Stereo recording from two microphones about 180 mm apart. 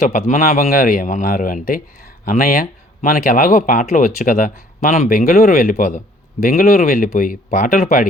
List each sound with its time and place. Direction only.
0.0 s speech: 45° left (ahead or behind)